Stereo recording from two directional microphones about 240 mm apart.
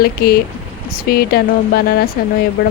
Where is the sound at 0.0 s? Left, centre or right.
Left.